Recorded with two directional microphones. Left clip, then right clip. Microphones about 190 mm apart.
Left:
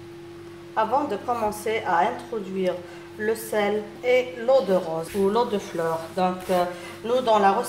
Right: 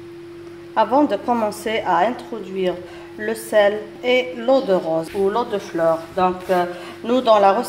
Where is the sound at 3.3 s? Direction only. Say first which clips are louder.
Right 7 dB; 45° right (ahead or behind).